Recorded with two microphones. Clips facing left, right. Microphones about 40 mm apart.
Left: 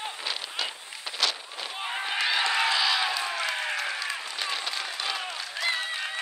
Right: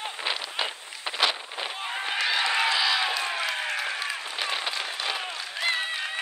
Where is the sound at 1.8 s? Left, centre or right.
Centre.